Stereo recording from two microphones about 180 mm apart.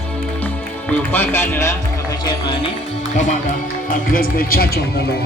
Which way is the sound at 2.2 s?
25° left (ahead or behind).